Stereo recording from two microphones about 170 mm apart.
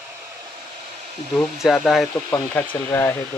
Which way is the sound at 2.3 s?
10° left (ahead or behind).